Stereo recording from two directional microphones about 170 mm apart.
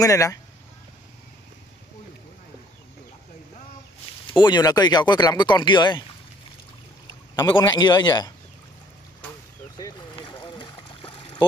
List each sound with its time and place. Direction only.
0.0 s speech: 20° left (ahead or behind)
4.3 s speech: 25° left (ahead or behind)
7.4 s speech: 25° left (ahead or behind)
9.8 s boat: 25° left (ahead or behind)